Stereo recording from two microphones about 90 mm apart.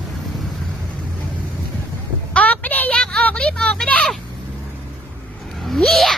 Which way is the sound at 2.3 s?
15° left (ahead or behind).